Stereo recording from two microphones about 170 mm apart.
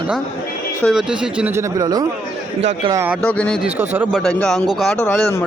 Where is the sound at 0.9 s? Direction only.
5° right (ahead or behind).